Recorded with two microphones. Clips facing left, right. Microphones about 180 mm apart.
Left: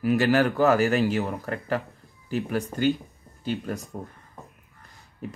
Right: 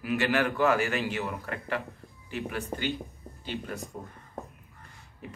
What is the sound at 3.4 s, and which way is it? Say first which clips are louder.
Speech: left 6 dB; 45° left (ahead or behind).